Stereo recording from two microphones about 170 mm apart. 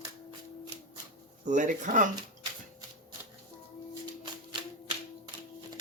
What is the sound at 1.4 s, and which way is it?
Speech, 45° right (ahead or behind).